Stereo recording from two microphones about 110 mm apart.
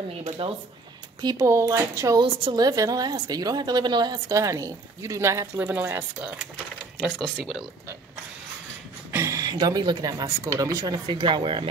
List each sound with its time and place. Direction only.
0.4 s speech: 50° right (ahead or behind)
1.4 s a woman's voice: 25° right (ahead or behind)
7.0 s speech: centre (ahead or behind)
9.1 s a woman's voice: 25° right (ahead or behind)
11.1 s speech: 45° right (ahead or behind)